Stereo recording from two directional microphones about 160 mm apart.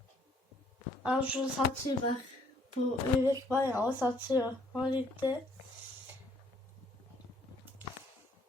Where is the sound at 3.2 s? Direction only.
15° right (ahead or behind).